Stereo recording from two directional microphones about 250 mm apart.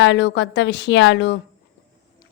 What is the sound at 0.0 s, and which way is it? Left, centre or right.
Speech, left.